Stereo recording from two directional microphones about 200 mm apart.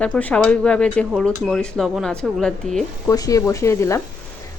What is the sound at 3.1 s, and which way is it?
Speech, 15° left (ahead or behind).